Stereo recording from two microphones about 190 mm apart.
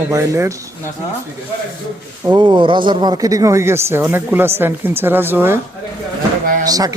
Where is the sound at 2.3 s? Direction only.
25° right (ahead or behind).